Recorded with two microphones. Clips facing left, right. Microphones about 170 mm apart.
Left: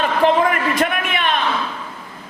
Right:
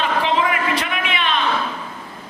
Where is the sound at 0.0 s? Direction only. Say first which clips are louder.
Left 4 dB; 50° left (ahead or behind).